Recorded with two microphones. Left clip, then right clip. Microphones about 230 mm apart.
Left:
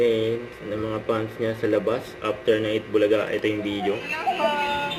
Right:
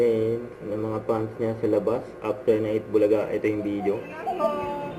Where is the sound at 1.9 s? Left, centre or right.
Left.